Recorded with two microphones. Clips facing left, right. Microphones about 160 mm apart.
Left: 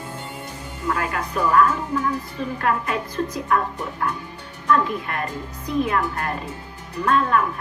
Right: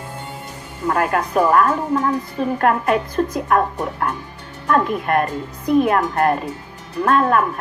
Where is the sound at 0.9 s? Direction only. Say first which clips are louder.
Right 6 dB; 55° right (ahead or behind).